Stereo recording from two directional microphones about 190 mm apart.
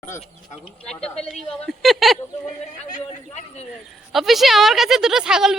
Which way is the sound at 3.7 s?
Centre (ahead or behind).